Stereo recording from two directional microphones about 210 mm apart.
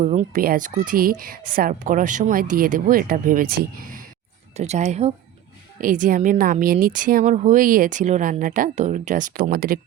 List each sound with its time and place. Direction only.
0.0 s a woman's voice: 35° right (ahead or behind)
4.5 s a woman's voice: 30° right (ahead or behind)